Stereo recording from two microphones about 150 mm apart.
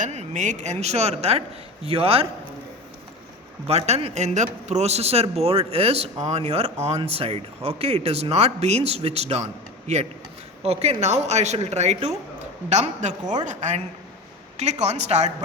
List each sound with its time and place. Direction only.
0.0 s speech: 50° right (ahead or behind)
3.7 s speech: 45° right (ahead or behind)